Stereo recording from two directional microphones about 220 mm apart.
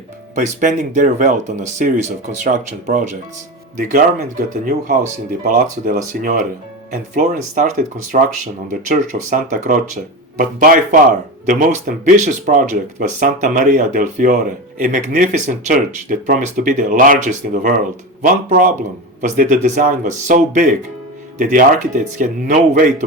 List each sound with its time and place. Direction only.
0.3 s speech: 35° right (ahead or behind)
12.1 s speech: 35° right (ahead or behind)